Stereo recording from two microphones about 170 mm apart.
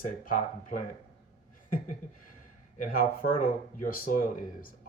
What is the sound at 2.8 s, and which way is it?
Speech, 55° left (ahead or behind).